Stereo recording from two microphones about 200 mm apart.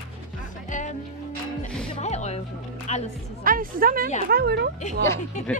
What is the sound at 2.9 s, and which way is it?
Speech, 35° left (ahead or behind).